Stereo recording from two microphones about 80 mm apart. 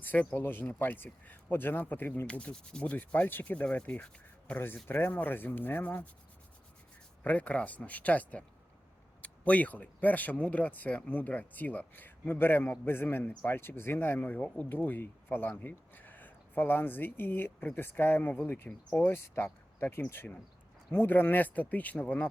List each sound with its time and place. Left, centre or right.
0.0 s speech: left
7.3 s speech: centre
20.9 s speech: left